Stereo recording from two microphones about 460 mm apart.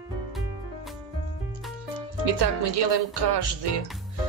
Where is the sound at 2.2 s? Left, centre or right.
Right.